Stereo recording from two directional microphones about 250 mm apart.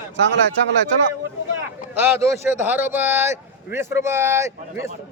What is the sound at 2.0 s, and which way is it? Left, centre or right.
Speech, centre.